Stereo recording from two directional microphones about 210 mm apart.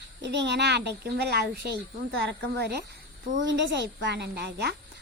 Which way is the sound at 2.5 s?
50° right (ahead or behind).